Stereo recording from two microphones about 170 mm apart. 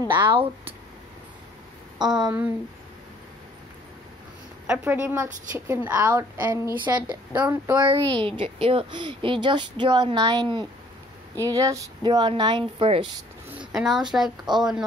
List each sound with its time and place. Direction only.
0.1 s speech: 30° right (ahead or behind)
2.0 s speech: 25° right (ahead or behind)
4.6 s speech: 10° right (ahead or behind)
7.3 s speech: 10° right (ahead or behind)
8.3 s speech: 35° right (ahead or behind)
13.7 s a woman's voice: 5° right (ahead or behind)